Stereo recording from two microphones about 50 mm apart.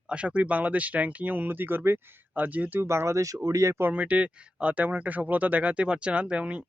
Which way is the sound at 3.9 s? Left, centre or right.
Right.